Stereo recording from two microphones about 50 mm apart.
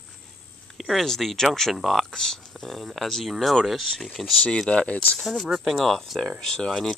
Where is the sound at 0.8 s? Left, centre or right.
Centre.